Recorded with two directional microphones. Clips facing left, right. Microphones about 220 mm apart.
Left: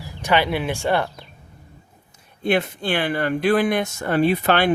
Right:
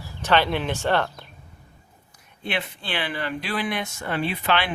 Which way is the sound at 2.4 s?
45° left (ahead or behind).